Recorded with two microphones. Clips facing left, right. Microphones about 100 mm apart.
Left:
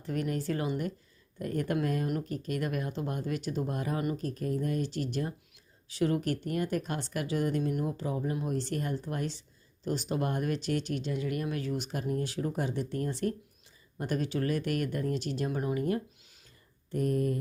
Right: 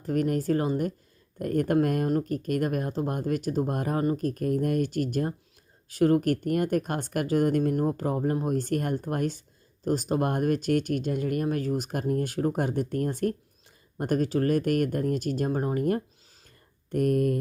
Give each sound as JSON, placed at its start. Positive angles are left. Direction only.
{"t": 0.0, "sound": "speech", "side_deg": -45}
{"t": 16.9, "sound": "speech", "side_deg": -60}